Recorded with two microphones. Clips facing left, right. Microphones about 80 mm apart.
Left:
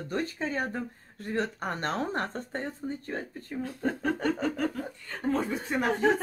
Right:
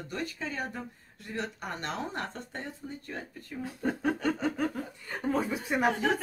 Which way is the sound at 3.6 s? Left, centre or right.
Centre.